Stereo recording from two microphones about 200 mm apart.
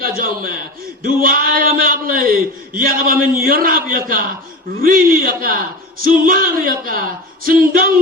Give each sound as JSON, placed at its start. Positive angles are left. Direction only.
{"t": 0.0, "sound": "a man's voice", "side_deg": -45}